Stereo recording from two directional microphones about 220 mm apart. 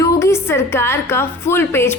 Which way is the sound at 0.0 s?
15° left (ahead or behind).